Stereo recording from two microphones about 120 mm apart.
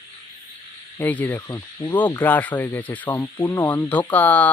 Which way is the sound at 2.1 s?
15° left (ahead or behind).